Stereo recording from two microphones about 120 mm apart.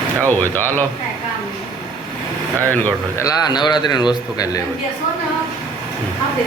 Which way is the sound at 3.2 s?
35° left (ahead or behind).